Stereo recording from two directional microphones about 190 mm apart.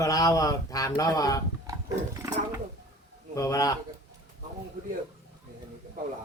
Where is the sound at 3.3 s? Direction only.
15° left (ahead or behind).